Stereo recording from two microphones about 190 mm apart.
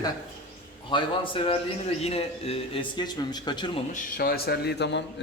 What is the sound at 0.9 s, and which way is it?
A man's voice, 25° left (ahead or behind).